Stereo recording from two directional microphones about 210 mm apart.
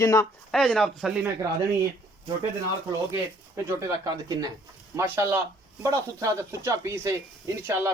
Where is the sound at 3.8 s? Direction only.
20° right (ahead or behind).